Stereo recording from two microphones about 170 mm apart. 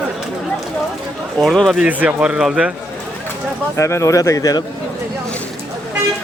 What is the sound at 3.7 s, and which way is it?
Speech, 15° left (ahead or behind).